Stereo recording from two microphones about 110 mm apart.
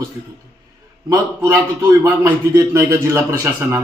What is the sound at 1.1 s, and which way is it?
A man's voice, 25° right (ahead or behind).